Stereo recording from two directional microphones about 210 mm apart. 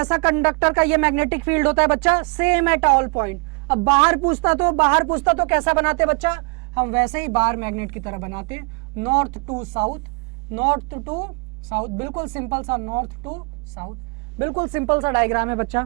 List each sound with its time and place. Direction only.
0.1 s speech: 15° right (ahead or behind)
4.3 s speech: 10° right (ahead or behind)
12.7 s speech: 25° right (ahead or behind)
14.6 s speech: 10° right (ahead or behind)